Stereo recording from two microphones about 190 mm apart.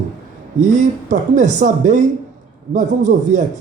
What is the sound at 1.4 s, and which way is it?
Speech, 40° right (ahead or behind).